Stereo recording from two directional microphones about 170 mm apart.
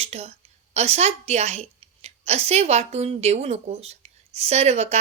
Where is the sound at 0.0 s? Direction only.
40° right (ahead or behind).